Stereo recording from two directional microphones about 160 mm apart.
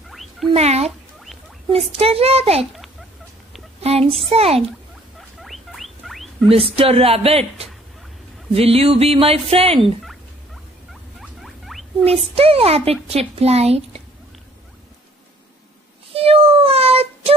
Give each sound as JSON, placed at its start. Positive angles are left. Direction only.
{"t": 0.1, "sound": "rodents", "side_deg": 0}
{"t": 0.5, "sound": "music", "side_deg": -40}
{"t": 3.8, "sound": "a child's voice", "side_deg": -40}
{"t": 4.2, "sound": "music", "side_deg": -40}
{"t": 5.4, "sound": "rodents", "side_deg": 0}
{"t": 6.5, "sound": "music", "side_deg": -35}
{"t": 10.0, "sound": "rodents", "side_deg": 0}
{"t": 12.0, "sound": "music", "side_deg": -40}
{"t": 13.1, "sound": "a woman's voice", "side_deg": -40}
{"t": 16.1, "sound": "child singing", "side_deg": -35}